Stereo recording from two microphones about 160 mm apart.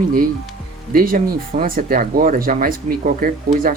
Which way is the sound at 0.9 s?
60° right (ahead or behind).